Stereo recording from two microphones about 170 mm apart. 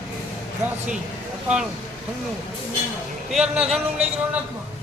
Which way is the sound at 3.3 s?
5° right (ahead or behind).